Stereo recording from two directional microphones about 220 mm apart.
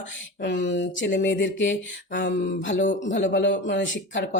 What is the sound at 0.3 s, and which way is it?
Speech, 55° left (ahead or behind).